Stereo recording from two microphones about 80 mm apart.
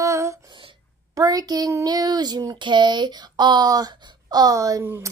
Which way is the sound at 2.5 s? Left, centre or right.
Right.